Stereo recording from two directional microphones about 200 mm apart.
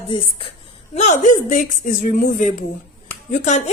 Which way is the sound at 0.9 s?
35° left (ahead or behind).